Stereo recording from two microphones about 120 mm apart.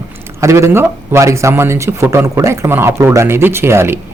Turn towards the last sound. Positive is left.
turn(degrees=-20)  # may be behind; listen again after turning